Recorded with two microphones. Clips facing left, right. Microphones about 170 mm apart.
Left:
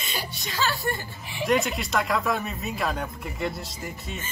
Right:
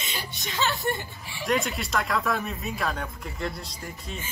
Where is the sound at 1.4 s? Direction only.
Centre (ahead or behind).